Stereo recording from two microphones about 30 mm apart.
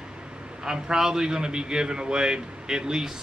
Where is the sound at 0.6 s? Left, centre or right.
Right.